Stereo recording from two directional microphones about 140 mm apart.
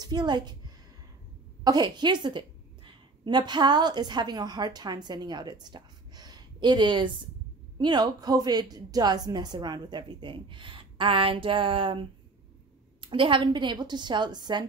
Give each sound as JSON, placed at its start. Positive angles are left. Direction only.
{"t": 0.0, "sound": "a woman's voice", "side_deg": -30}